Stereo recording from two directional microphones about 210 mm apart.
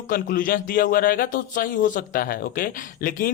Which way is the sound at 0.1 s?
45° left (ahead or behind).